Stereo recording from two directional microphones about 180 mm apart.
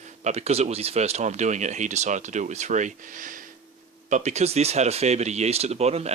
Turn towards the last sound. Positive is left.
turn(degrees=-35)  # may be behind; listen again after turning